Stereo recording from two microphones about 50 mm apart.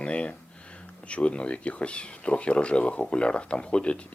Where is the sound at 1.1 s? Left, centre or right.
Left.